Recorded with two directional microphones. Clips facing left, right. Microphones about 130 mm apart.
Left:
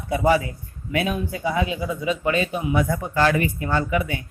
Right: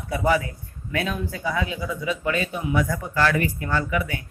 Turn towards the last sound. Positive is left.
turn(degrees=25)  # may be behind; listen again after turning